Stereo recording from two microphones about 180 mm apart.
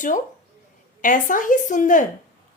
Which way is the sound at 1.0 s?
45° left (ahead or behind).